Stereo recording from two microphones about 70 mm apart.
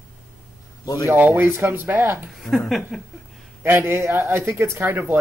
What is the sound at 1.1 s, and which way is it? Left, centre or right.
Speech, right.